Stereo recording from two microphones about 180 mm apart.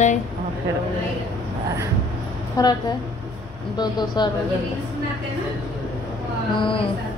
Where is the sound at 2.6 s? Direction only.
20° left (ahead or behind).